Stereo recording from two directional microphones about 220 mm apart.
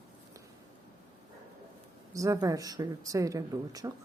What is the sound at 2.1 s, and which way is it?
Speech, 15° right (ahead or behind).